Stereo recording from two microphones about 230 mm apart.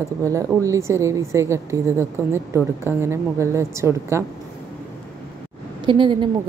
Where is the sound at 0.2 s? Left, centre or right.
Centre.